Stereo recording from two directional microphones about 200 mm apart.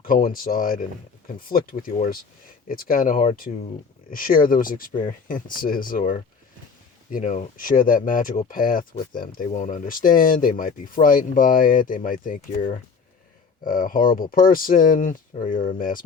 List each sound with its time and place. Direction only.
0.0 s speech: 45° left (ahead or behind)